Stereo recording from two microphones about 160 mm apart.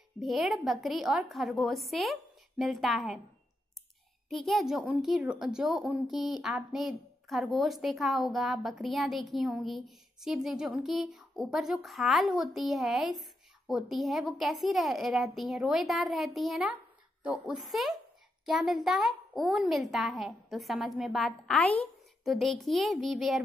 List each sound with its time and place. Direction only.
0.2 s a woman's voice: centre (ahead or behind)
4.3 s a woman's voice: centre (ahead or behind)
6.1 s speech: 25° left (ahead or behind)
6.4 s a woman's voice: centre (ahead or behind)